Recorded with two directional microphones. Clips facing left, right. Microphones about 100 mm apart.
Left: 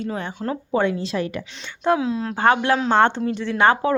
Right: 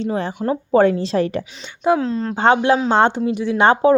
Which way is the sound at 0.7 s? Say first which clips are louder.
Right 7 dB; 40° right (ahead or behind).